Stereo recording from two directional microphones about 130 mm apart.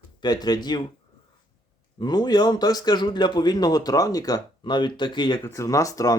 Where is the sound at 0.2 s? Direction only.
30° left (ahead or behind).